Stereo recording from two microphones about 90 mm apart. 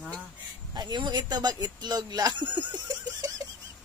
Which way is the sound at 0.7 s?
50° right (ahead or behind).